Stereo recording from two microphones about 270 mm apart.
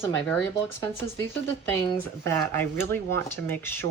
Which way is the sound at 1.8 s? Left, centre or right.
Centre.